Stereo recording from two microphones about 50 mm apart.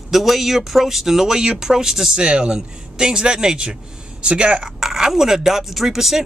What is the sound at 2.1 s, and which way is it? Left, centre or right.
Speech, centre.